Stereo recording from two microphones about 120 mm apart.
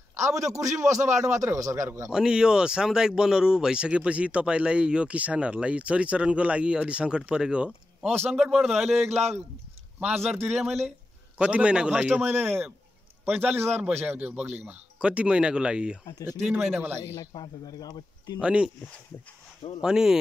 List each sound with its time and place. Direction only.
0.1 s a man's voice: 25° right (ahead or behind)
2.0 s a man's voice: 5° right (ahead or behind)
9.9 s speech: 15° right (ahead or behind)
17.2 s speech: 35° left (ahead or behind)
18.4 s speech: 10° right (ahead or behind)
19.8 s a man's voice: 5° right (ahead or behind)